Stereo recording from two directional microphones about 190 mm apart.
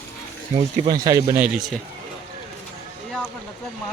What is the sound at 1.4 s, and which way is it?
Speech, 5° right (ahead or behind).